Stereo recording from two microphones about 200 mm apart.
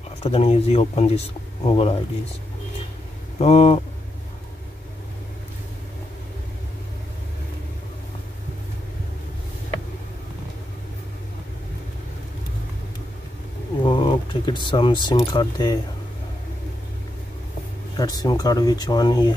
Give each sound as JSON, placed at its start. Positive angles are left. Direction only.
{"t": 0.2, "sound": "speech", "side_deg": 30}
{"t": 3.3, "sound": "speech", "side_deg": 30}
{"t": 13.8, "sound": "a sound", "side_deg": 25}
{"t": 17.9, "sound": "speech", "side_deg": 20}